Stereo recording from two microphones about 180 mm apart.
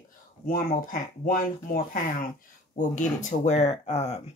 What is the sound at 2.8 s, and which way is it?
Speech, 40° left (ahead or behind).